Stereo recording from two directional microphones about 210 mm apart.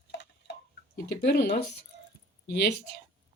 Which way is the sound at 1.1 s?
55° left (ahead or behind).